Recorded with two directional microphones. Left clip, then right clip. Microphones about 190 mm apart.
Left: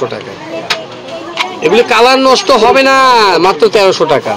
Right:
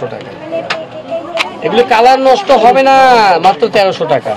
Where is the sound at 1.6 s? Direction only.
50° left (ahead or behind).